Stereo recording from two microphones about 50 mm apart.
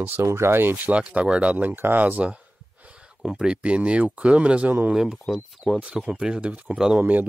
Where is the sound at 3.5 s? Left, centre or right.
Right.